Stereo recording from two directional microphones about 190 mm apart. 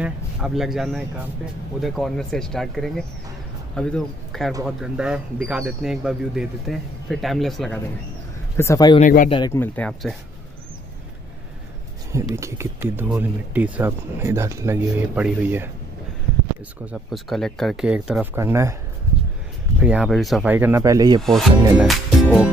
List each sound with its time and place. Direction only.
0.0 s speech: 5° right (ahead or behind)
8.5 s speech: 15° left (ahead or behind)
9.0 s speech: 45° left (ahead or behind)
9.5 s speech: 10° left (ahead or behind)
12.4 s speech: 15° right (ahead or behind)
16.8 s speech: centre (ahead or behind)
19.8 s speech: 5° right (ahead or behind)
20.5 s speech: 10° right (ahead or behind)
21.2 s speech: centre (ahead or behind)
21.7 s music: 5° right (ahead or behind)